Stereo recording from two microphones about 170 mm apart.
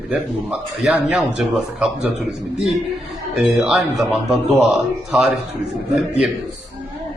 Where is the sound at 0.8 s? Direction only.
5° right (ahead or behind).